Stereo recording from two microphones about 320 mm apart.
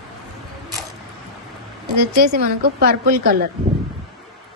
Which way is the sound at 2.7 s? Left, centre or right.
Right.